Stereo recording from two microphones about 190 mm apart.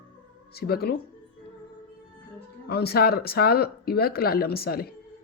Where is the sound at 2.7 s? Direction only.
55° left (ahead or behind).